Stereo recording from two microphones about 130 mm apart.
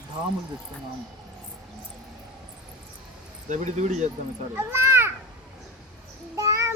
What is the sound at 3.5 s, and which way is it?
Speech, 65° right (ahead or behind).